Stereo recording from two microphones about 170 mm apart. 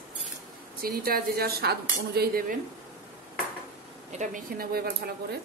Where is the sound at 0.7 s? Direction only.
60° right (ahead or behind).